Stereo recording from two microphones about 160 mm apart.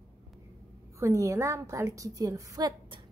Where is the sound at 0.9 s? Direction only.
20° right (ahead or behind).